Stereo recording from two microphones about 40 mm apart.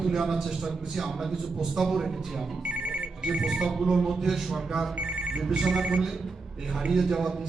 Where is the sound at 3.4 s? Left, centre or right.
Centre.